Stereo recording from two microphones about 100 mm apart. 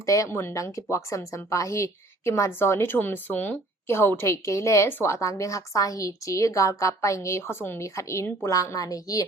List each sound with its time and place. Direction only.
0.0 s a woman's voice: 30° left (ahead or behind)